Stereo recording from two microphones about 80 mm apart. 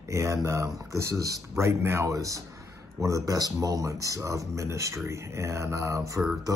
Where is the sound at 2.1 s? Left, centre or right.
Right.